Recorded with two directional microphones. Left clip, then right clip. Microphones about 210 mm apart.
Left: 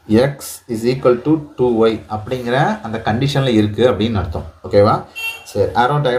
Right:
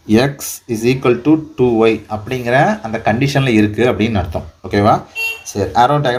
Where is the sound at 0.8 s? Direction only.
40° right (ahead or behind).